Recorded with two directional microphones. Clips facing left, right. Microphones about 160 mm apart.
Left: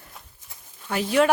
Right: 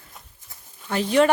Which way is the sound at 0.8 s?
5° left (ahead or behind).